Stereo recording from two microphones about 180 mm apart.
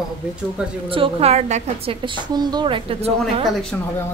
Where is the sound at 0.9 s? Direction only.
30° right (ahead or behind).